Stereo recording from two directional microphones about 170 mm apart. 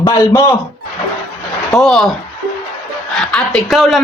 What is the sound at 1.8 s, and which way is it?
Speech, centre (ahead or behind).